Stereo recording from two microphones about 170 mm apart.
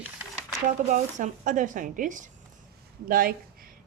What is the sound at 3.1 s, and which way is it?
Speech, 60° right (ahead or behind).